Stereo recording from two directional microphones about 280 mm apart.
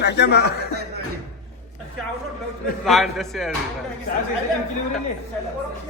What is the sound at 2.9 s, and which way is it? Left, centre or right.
Speech, centre.